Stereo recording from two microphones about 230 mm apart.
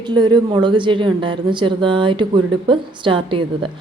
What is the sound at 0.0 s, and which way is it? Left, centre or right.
A woman's voice, centre.